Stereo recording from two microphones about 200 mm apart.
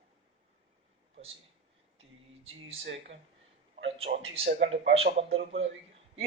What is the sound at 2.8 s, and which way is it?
Speech, 65° right (ahead or behind).